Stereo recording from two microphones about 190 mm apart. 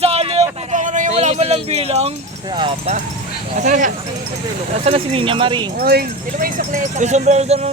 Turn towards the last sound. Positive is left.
turn(degrees=-35)  # may be behind; listen again after turning